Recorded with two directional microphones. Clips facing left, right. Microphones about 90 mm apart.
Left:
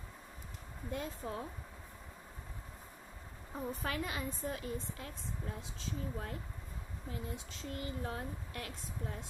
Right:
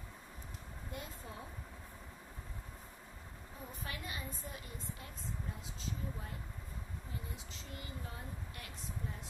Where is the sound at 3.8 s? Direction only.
70° left (ahead or behind).